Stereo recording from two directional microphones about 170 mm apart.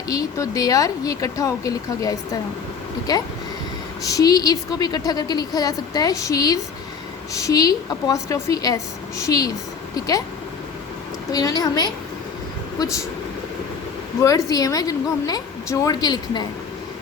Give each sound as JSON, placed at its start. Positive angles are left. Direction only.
{"t": 0.1, "sound": "a woman's voice", "side_deg": 20}
{"t": 11.3, "sound": "a woman's voice", "side_deg": 20}
{"t": 14.2, "sound": "a woman's voice", "side_deg": 20}